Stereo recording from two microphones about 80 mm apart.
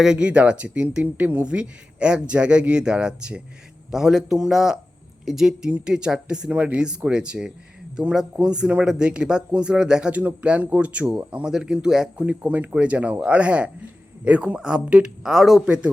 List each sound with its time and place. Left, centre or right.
0.0 s speech: centre